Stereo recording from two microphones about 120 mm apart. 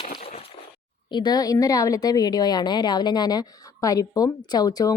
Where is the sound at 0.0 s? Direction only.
55° left (ahead or behind).